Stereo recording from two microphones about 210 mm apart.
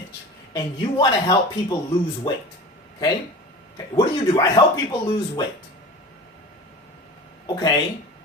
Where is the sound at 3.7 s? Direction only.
15° left (ahead or behind).